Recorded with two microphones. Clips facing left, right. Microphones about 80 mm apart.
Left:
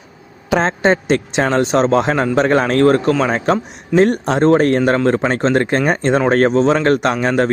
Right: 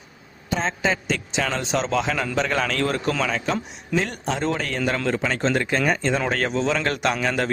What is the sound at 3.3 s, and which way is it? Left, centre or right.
A man's voice, left.